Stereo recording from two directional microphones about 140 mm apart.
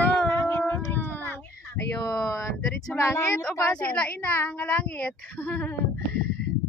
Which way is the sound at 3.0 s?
20° left (ahead or behind).